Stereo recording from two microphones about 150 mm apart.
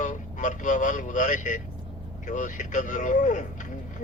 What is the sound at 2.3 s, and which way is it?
Speech, 55° left (ahead or behind).